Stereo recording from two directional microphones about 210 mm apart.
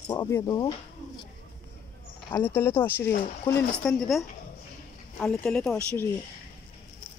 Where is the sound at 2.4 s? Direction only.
10° left (ahead or behind).